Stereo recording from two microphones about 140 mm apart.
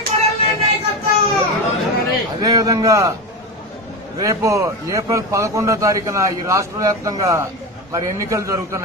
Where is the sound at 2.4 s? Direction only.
25° right (ahead or behind).